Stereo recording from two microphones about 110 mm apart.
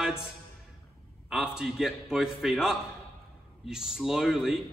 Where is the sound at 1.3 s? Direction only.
5° right (ahead or behind).